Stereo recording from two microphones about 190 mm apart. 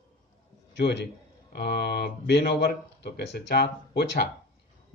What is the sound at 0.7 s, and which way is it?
A man's voice, 65° left (ahead or behind).